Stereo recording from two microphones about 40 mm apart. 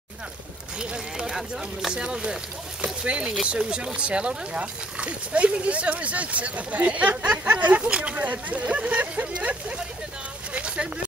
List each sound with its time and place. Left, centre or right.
0.7 s speech: right
1.3 s speech: centre
2.0 s speech: right
10.5 s vehicle: right